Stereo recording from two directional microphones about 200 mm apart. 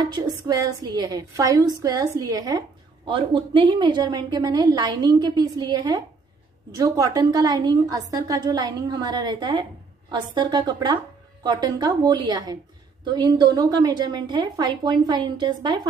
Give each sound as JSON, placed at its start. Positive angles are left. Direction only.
{"t": 0.0, "sound": "a woman's voice", "side_deg": -20}